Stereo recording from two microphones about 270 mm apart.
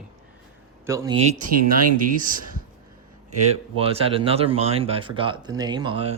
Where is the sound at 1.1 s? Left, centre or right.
Right.